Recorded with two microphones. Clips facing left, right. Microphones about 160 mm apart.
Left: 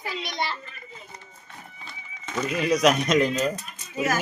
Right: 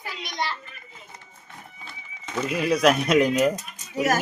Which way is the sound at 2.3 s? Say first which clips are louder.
Even; 5° right (ahead or behind).